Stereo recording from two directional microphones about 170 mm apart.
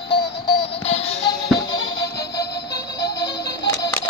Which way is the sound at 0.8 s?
35° left (ahead or behind).